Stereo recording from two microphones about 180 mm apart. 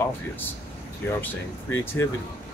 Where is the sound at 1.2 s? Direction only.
10° left (ahead or behind).